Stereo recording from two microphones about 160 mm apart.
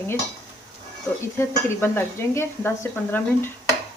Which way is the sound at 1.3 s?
15° left (ahead or behind).